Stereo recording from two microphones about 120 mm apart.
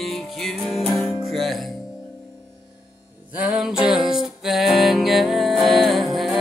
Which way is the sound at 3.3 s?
5° right (ahead or behind).